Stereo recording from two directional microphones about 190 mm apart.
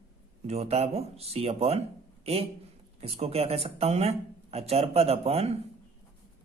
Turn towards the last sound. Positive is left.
turn(degrees=-30)  # may be behind; listen again after turning